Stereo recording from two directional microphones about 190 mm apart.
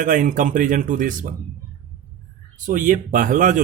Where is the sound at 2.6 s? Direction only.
45° right (ahead or behind).